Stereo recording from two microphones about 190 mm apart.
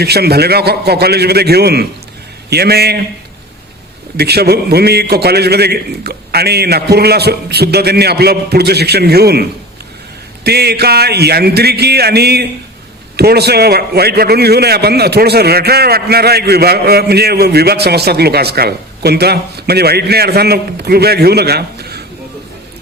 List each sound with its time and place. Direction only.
0.0 s a man's voice: 55° right (ahead or behind)
4.2 s a man's voice: 55° right (ahead or behind)